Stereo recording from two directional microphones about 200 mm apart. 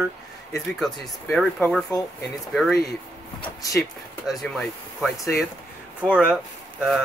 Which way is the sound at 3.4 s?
15° left (ahead or behind).